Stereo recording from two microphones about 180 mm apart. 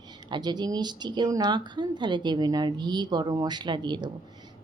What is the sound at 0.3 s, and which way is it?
Speech, 25° right (ahead or behind).